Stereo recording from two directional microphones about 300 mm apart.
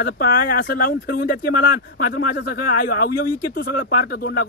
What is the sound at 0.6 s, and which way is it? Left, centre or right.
Speech, left.